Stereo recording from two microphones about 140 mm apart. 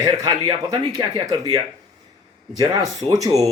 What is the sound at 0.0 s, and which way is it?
Speech, 25° right (ahead or behind).